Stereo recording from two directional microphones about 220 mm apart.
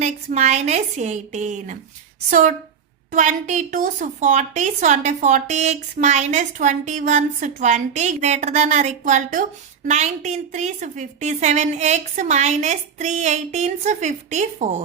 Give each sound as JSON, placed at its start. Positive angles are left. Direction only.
{"t": 0.0, "sound": "a woman's voice", "side_deg": -30}
{"t": 3.1, "sound": "a woman's voice", "side_deg": -35}